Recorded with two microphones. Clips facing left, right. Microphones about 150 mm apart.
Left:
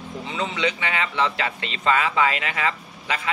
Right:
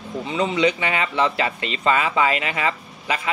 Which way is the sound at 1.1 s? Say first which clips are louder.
Right 3 dB; 15° right (ahead or behind).